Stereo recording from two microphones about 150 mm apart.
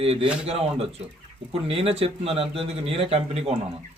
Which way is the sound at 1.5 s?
40° right (ahead or behind).